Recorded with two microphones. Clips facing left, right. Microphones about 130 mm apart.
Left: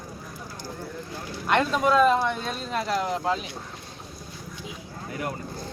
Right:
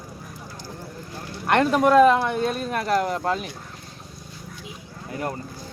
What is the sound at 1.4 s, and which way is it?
Speech, 55° right (ahead or behind).